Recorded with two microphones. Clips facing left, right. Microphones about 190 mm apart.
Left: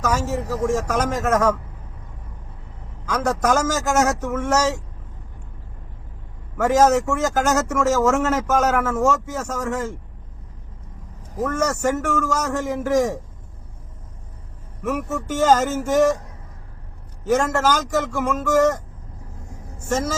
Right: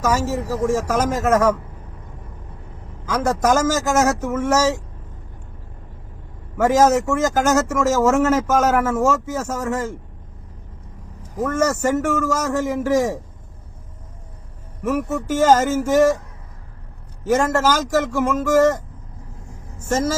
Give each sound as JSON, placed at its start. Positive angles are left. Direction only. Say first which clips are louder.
{"t": 0.0, "sound": "speech", "louder": "right 2 dB", "side_deg": 0}
{"t": 3.1, "sound": "speech", "louder": "right 2 dB", "side_deg": -5}
{"t": 6.6, "sound": "speech", "louder": "right 1 dB", "side_deg": -5}
{"t": 11.4, "sound": "speech", "louder": "right 2 dB", "side_deg": -5}
{"t": 14.8, "sound": "speech", "louder": "right 3 dB", "side_deg": -5}
{"t": 17.8, "sound": "speech", "louder": "right 3 dB", "side_deg": -5}